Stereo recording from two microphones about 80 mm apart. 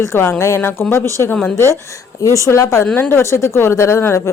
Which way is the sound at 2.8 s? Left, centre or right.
Left.